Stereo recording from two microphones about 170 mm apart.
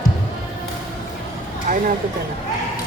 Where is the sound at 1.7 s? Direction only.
55° right (ahead or behind).